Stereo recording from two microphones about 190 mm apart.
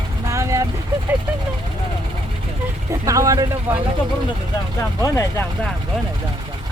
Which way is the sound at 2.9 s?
15° right (ahead or behind).